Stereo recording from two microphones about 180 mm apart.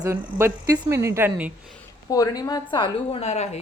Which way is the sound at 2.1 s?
20° left (ahead or behind).